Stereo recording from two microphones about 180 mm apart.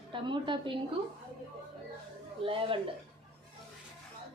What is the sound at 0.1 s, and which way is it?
Speech, 25° right (ahead or behind).